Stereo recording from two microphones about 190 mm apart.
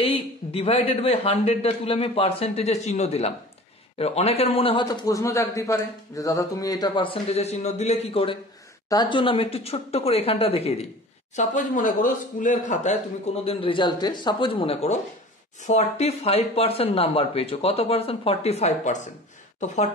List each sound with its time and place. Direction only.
0.0 s a man's voice: 30° left (ahead or behind)
11.3 s speech: 45° left (ahead or behind)
13.4 s a man's voice: 30° left (ahead or behind)